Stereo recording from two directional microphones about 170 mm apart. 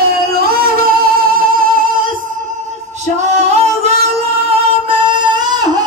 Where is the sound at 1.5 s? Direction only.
55° right (ahead or behind).